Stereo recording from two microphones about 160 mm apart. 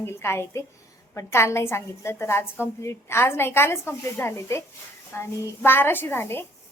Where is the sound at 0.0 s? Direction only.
15° left (ahead or behind).